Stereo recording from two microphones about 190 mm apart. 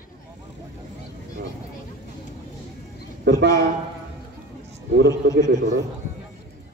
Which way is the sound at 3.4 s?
65° right (ahead or behind).